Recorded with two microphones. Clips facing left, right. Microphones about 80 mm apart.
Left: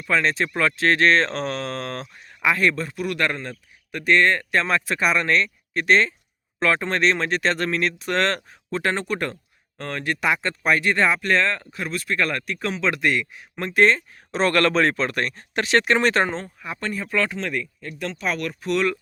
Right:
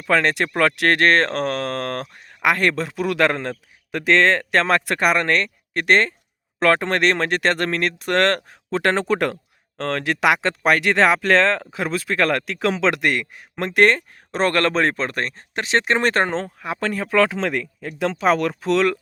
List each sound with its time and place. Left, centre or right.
0.0 s speech: right
6.6 s speech: right
8.7 s a man's voice: right
13.6 s speech: right
14.3 s speech: right
16.0 s speech: right
16.3 s speech: right